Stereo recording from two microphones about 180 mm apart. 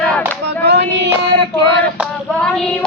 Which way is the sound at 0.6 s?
70° right (ahead or behind).